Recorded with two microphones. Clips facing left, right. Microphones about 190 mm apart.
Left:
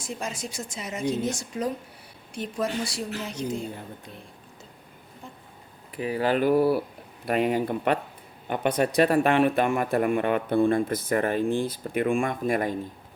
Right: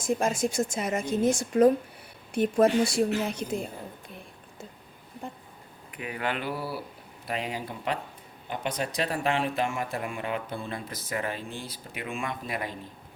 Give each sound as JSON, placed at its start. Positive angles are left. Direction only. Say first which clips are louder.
{"t": 0.0, "sound": "a woman's voice", "louder": "right 8 dB", "side_deg": -50}
{"t": 5.2, "sound": "a sound", "louder": "right 6 dB", "side_deg": -60}
{"t": 5.9, "sound": "a man's voice", "louder": "left 8 dB", "side_deg": 35}